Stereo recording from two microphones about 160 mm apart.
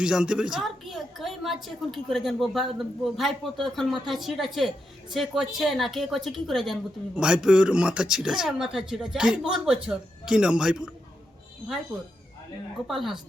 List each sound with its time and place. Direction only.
0.0 s a woman's voice: 5° right (ahead or behind)
12.9 s a woman's voice: centre (ahead or behind)